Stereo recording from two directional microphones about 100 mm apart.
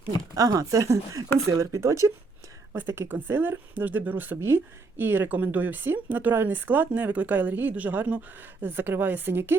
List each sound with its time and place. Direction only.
0.3 s speech: 35° right (ahead or behind); by 9.6 s 20° right (ahead or behind)